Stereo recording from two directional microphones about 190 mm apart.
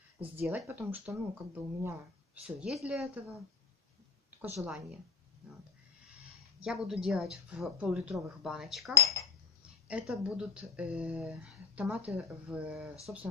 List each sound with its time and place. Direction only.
0.4 s speech: 10° right (ahead or behind)
4.4 s speech: 5° right (ahead or behind)
6.6 s speech: centre (ahead or behind)
8.9 s speech: 15° left (ahead or behind)
9.8 s speech: 5° right (ahead or behind)